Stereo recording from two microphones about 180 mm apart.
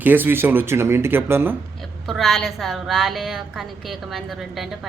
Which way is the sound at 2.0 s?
Centre (ahead or behind).